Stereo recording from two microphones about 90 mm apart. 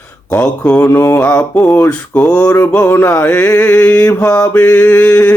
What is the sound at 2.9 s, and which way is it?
Mantra, 25° left (ahead or behind).